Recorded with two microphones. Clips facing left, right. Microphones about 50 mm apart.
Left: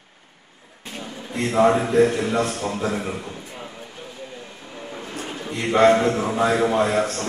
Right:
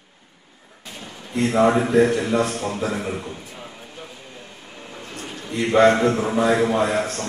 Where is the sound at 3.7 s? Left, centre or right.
Centre.